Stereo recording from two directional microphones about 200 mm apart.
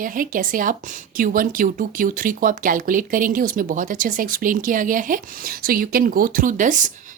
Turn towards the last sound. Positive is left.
turn(degrees=-40)  # may be behind; listen again after turning